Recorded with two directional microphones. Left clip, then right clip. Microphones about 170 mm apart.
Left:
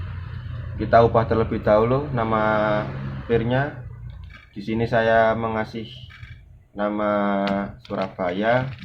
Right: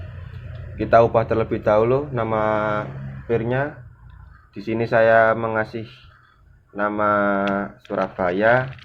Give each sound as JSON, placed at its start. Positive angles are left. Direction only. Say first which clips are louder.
{"t": 0.8, "sound": "speech", "louder": "right 1 dB", "side_deg": -50}